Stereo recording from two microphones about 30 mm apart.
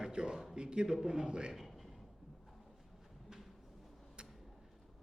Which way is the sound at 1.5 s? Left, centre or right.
Centre.